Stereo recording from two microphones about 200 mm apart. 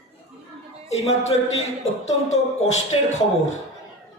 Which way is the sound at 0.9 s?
30° left (ahead or behind).